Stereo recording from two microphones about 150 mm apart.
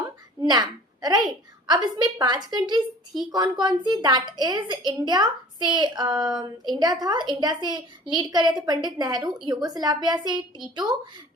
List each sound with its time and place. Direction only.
0.5 s a woman's voice: 25° right (ahead or behind)